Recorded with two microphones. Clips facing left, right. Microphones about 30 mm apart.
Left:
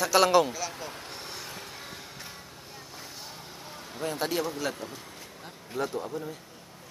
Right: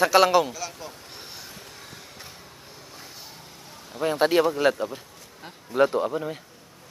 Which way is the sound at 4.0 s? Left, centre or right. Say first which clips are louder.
Right 9 dB; right.